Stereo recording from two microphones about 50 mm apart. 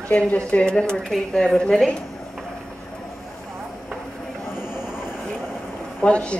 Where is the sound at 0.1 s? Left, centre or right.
Left; by 1.9 s centre.